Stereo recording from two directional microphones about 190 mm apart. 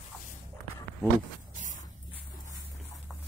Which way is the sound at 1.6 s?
40° right (ahead or behind).